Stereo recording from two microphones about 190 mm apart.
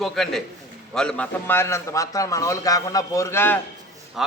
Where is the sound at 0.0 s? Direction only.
Centre (ahead or behind).